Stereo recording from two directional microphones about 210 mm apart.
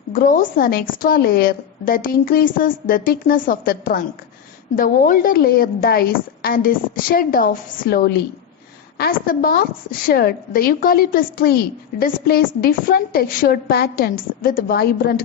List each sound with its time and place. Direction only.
0.1 s a woman's voice: 40° left (ahead or behind)